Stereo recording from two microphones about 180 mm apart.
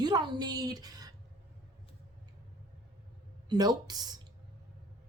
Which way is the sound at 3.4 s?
20° right (ahead or behind).